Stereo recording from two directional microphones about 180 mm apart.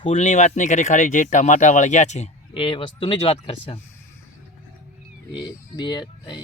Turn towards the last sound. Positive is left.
turn(degrees=25)  # may be behind; listen again after turning